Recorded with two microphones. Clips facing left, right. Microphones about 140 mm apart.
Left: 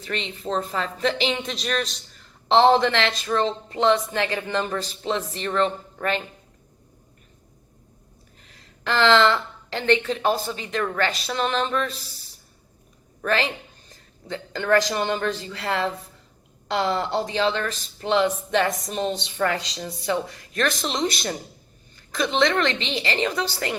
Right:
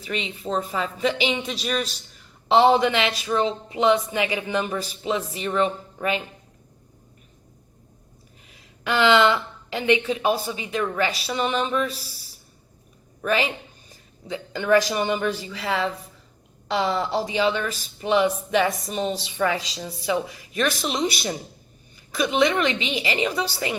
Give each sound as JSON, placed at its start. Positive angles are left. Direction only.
{"t": 0.0, "sound": "speech", "side_deg": -5}
{"t": 8.4, "sound": "speech", "side_deg": -10}
{"t": 13.2, "sound": "speech", "side_deg": -10}